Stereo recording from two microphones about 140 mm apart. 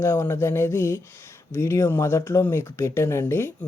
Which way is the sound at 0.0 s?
20° left (ahead or behind).